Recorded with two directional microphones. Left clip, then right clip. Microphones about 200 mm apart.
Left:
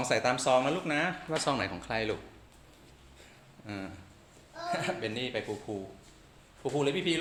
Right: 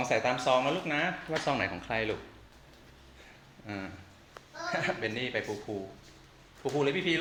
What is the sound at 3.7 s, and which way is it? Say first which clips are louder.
Speech: right 1 dB; 15° left (ahead or behind).